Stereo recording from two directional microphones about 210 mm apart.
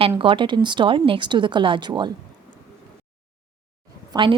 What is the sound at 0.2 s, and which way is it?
A woman's voice, 25° right (ahead or behind).